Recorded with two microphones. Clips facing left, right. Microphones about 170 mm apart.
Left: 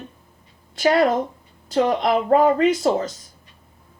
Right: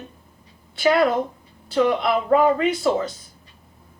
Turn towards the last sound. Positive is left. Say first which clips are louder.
# left 2 dB
turn(degrees=40)  # may be behind; listen again after turning